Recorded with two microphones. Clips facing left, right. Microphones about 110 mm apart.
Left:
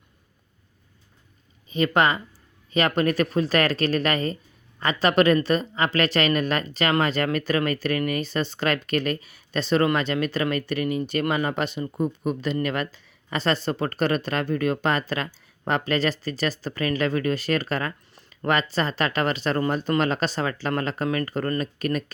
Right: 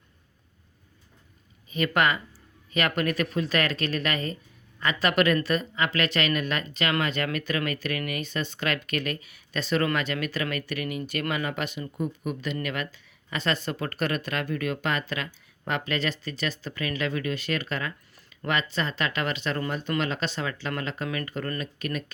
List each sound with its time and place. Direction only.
1.7 s speech: 25° left (ahead or behind)